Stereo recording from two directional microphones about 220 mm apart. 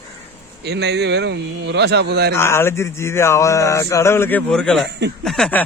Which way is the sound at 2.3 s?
10° left (ahead or behind).